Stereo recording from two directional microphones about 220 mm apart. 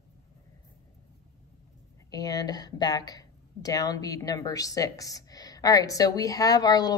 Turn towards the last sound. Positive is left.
turn(degrees=15)  # may be behind; listen again after turning